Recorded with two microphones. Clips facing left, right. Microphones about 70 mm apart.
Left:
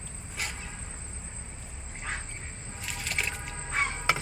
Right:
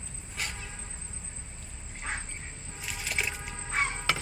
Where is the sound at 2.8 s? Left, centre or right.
Centre.